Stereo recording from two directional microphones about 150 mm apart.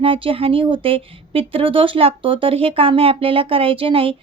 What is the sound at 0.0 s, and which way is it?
Speech, 35° right (ahead or behind).